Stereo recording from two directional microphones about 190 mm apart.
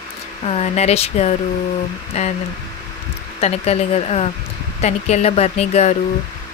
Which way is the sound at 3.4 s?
35° left (ahead or behind).